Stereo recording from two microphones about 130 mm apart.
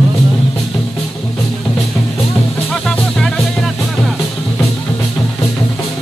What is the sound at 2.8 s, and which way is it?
Music, 5° left (ahead or behind).